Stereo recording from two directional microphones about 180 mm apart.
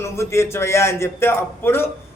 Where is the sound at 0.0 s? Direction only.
15° left (ahead or behind).